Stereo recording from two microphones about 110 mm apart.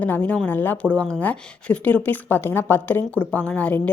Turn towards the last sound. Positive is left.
turn(degrees=10)  # may be behind; listen again after turning